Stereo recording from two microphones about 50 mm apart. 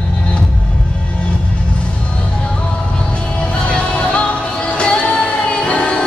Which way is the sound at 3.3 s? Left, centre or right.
Left.